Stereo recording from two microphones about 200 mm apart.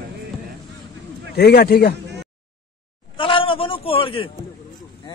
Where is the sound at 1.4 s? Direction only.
55° left (ahead or behind).